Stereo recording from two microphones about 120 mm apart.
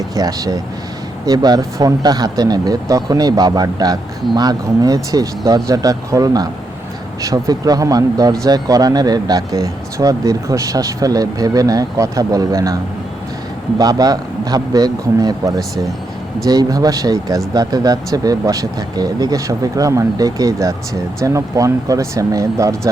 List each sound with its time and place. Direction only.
0.2 s speech: 30° right (ahead or behind)